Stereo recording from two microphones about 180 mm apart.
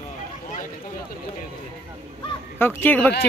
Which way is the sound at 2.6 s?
10° left (ahead or behind).